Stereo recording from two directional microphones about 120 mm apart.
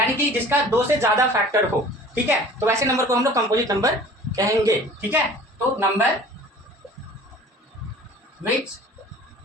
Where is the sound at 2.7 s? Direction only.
25° right (ahead or behind).